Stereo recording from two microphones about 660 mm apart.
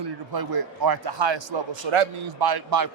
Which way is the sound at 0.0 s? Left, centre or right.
Right.